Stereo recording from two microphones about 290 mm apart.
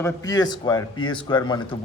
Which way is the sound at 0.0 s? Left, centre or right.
Centre.